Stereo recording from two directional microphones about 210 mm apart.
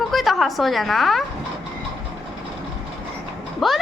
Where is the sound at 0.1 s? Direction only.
Centre (ahead or behind).